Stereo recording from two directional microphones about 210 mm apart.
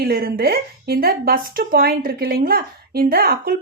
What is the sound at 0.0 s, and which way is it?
A woman's voice, 45° right (ahead or behind).